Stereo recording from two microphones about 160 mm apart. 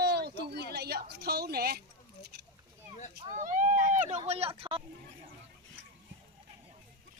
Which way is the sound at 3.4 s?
55° right (ahead or behind).